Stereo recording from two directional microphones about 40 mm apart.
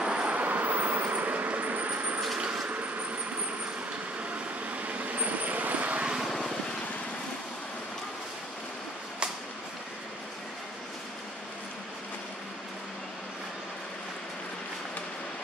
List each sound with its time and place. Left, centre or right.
0.0 s vehicle: right
2.3 s vehicle: right
2.7 s vehicle: right
4.6 s vehicle: right